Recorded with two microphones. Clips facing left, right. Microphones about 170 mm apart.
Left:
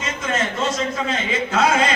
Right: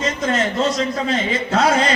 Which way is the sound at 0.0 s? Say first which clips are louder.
Right 4 dB; 35° right (ahead or behind).